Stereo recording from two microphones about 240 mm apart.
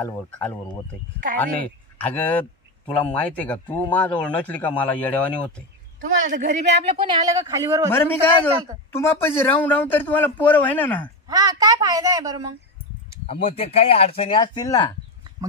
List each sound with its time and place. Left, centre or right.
0.0 s a man's voice: centre
2.0 s a man's voice: centre
5.9 s a man's voice: right
7.0 s a woman's voice: centre
7.9 s a man's voice: centre
11.2 s a woman's voice: centre
13.3 s speech: left